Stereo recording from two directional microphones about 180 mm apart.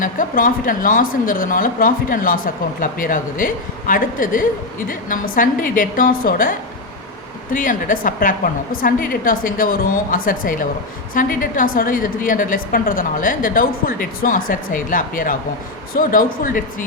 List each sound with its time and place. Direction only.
0.0 s speech: 50° left (ahead or behind)
7.5 s speech: 50° left (ahead or behind)